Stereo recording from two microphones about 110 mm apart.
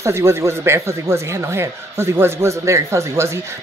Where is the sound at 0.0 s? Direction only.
25° right (ahead or behind).